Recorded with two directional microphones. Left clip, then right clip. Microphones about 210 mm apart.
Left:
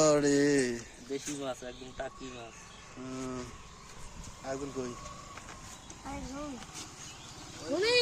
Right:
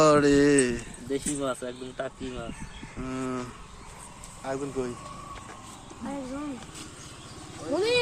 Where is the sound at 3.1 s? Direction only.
Centre (ahead or behind).